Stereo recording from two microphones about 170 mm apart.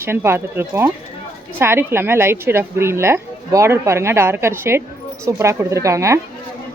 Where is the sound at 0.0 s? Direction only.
15° right (ahead or behind).